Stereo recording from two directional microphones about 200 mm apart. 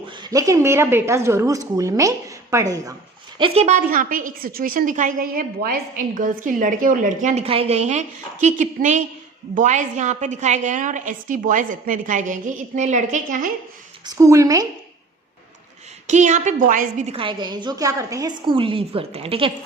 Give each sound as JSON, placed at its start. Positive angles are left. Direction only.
{"t": 0.2, "sound": "a woman's voice", "side_deg": -15}
{"t": 3.3, "sound": "a woman's voice", "side_deg": -30}
{"t": 3.8, "sound": "a woman's voice", "side_deg": -45}
{"t": 14.1, "sound": "a woman's voice", "side_deg": -15}
{"t": 16.0, "sound": "a woman's voice", "side_deg": -35}